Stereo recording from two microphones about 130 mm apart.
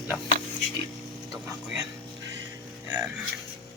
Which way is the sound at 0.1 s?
Centre (ahead or behind).